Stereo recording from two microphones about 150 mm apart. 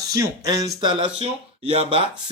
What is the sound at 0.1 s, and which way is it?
Speech, 25° right (ahead or behind).